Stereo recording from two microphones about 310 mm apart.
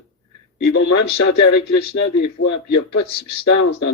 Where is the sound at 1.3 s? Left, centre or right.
Left.